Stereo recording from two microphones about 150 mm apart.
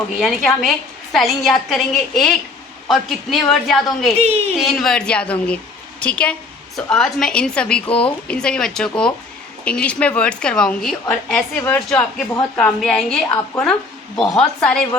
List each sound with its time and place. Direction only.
0.2 s a woman's voice: centre (ahead or behind)
4.2 s a woman's voice: 45° right (ahead or behind)
4.5 s a woman's voice: centre (ahead or behind)
11.5 s a woman's voice: 15° left (ahead or behind)